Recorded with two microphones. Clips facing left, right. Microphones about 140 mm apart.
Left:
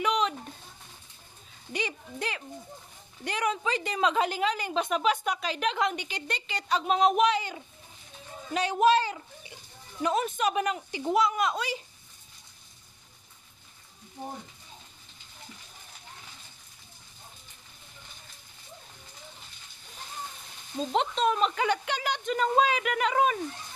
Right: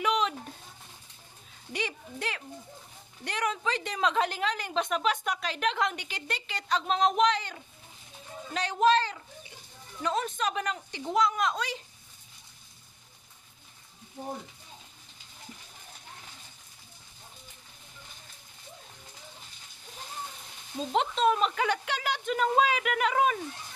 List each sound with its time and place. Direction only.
0.0 s a sound: centre (ahead or behind)
1.7 s a woman's voice: centre (ahead or behind)
20.9 s a woman's voice: centre (ahead or behind)